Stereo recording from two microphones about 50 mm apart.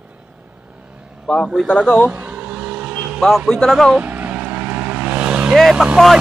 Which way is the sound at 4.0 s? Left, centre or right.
Right.